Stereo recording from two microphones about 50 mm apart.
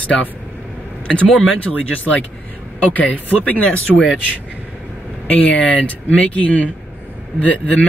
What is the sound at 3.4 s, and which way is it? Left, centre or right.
Speech, left.